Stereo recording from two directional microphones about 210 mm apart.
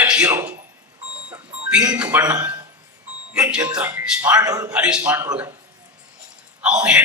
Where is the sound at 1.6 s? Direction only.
5° right (ahead or behind).